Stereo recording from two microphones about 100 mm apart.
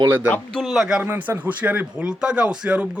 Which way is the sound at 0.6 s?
5° right (ahead or behind).